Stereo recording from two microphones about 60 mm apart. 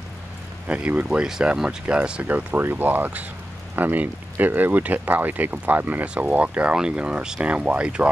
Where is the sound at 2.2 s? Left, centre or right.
Right.